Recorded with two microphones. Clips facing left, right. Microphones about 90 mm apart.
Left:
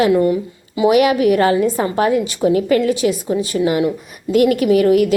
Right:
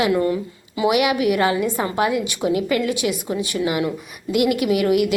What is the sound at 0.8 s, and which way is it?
A woman's voice, 40° left (ahead or behind).